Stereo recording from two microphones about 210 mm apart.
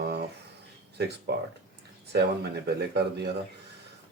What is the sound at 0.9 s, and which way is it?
Speech, 50° right (ahead or behind).